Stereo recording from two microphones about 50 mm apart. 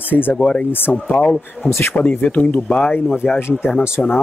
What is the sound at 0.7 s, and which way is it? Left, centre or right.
Speech, left.